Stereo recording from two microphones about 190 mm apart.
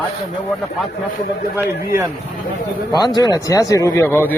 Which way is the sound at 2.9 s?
20° left (ahead or behind).